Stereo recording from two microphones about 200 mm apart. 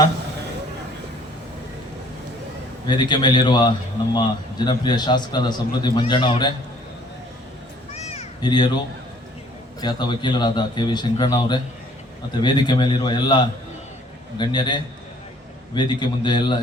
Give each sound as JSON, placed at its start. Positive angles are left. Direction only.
{"t": 2.8, "sound": "a man's voice", "side_deg": 20}
{"t": 7.9, "sound": "meow", "side_deg": 30}
{"t": 9.8, "sound": "a man's voice", "side_deg": 20}